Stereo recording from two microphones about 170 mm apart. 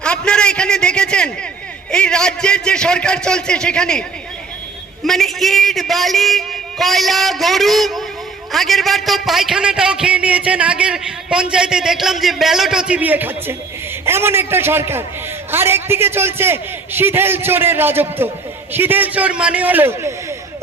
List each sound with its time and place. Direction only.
0.0 s a sound: 5° left (ahead or behind)
1.9 s a man's voice: 5° left (ahead or behind)
5.0 s a man's voice: centre (ahead or behind)